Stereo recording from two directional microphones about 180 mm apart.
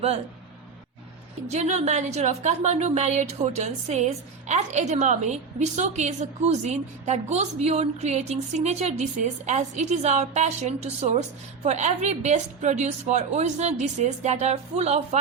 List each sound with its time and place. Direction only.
1.5 s a woman's voice: 40° right (ahead or behind)